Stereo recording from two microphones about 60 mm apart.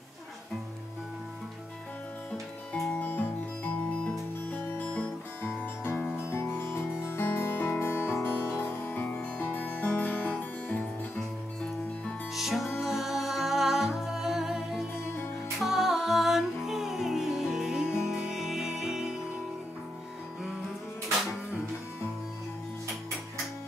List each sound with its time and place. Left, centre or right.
2.7 s music: centre
5.4 s music: left
12.4 s music: centre